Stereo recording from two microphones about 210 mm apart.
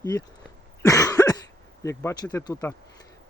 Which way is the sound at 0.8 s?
15° left (ahead or behind).